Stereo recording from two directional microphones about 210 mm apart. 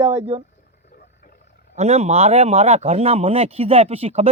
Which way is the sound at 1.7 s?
30° right (ahead or behind).